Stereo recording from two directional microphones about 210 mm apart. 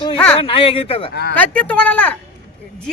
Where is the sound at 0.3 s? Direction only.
25° left (ahead or behind).